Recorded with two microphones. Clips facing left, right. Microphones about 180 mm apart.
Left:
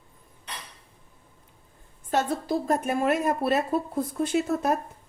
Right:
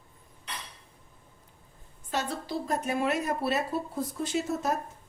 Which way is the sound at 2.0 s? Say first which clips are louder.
Left 7 dB; 50° left (ahead or behind).